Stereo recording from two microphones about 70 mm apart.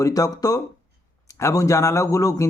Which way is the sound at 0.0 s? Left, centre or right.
Left.